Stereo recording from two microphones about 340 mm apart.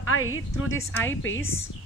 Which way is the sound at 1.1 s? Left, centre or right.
Left.